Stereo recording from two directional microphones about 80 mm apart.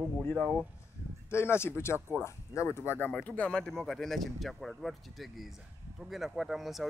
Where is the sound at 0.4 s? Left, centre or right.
Centre.